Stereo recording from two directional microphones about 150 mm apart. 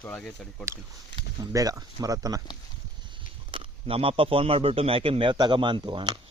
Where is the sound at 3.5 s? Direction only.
40° right (ahead or behind).